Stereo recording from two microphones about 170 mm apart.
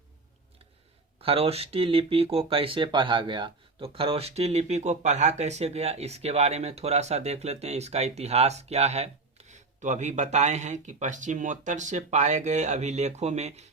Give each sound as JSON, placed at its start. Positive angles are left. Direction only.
{"t": 1.2, "sound": "speech", "side_deg": -35}